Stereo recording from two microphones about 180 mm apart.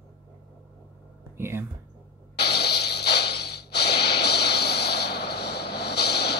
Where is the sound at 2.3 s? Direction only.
65° left (ahead or behind).